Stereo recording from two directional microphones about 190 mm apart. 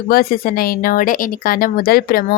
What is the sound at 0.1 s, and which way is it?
Speech, 50° left (ahead or behind).